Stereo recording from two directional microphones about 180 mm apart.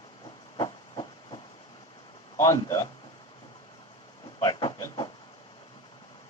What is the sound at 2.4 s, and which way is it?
Speech, 20° left (ahead or behind).